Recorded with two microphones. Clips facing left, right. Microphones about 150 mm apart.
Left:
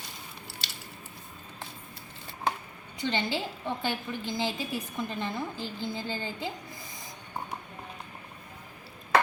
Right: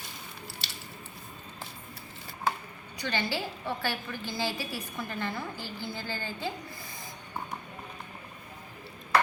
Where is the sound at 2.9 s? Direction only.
20° left (ahead or behind).